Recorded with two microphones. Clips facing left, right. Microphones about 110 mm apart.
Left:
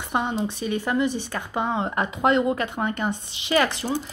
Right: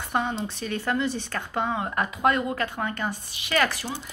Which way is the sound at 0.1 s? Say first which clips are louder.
Left 2 dB; 20° left (ahead or behind).